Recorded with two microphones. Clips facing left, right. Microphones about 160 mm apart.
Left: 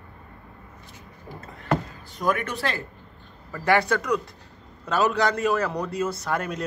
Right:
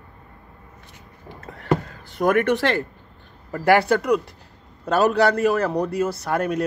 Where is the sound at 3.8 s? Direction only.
60° right (ahead or behind).